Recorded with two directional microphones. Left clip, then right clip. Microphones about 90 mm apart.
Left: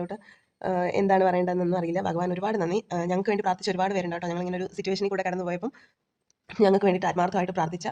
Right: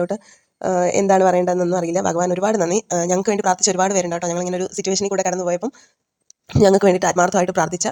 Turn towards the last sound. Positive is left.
turn(degrees=-90)